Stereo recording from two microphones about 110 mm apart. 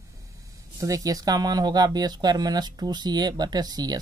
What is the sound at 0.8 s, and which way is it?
Speech, 30° right (ahead or behind).